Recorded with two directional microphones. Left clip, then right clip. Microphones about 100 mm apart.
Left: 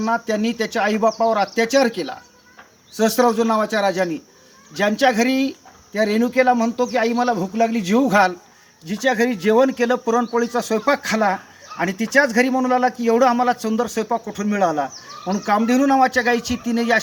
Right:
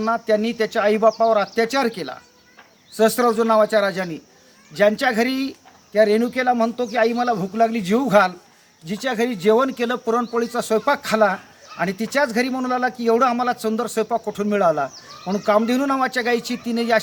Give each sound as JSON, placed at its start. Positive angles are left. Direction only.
{"t": 0.0, "sound": "a man's voice", "side_deg": -30}